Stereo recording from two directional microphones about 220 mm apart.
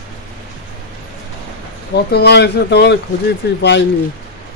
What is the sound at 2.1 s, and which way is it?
Speech, 50° left (ahead or behind).